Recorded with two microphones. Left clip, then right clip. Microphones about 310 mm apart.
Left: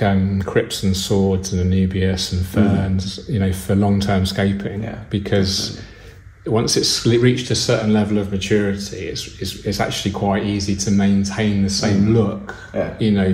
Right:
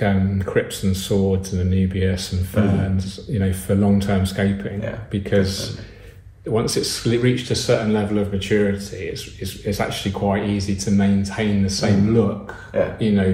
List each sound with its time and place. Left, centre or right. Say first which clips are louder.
0.0 s speech: left 2 dB; left